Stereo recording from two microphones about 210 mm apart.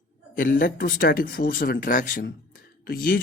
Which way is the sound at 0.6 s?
45° left (ahead or behind).